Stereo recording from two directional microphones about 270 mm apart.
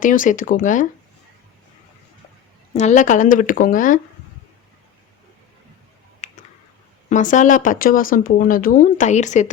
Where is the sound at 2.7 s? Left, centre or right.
Left.